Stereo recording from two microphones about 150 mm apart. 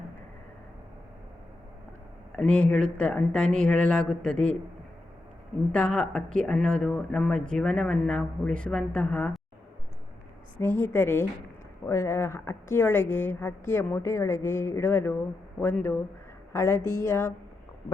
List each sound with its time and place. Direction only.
2.3 s speech: 5° left (ahead or behind)
5.7 s speech: 5° left (ahead or behind)
10.6 s a woman's voice: 15° left (ahead or behind)